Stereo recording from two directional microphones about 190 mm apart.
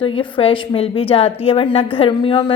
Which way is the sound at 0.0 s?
25° left (ahead or behind).